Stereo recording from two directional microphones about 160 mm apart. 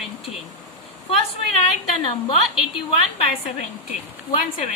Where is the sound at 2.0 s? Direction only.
30° left (ahead or behind).